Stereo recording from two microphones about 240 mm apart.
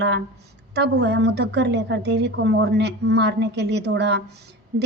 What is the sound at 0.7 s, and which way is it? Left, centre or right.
A woman's voice, right.